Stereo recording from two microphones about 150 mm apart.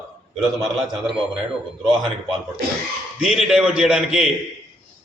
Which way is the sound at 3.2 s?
5° right (ahead or behind).